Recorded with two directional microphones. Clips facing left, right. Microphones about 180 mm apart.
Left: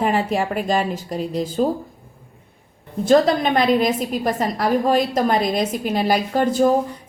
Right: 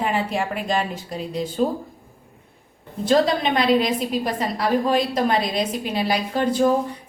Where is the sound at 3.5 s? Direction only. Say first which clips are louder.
Left 2 dB; 45° left (ahead or behind).